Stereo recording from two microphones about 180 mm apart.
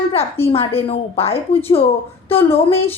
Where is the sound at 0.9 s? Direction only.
35° left (ahead or behind).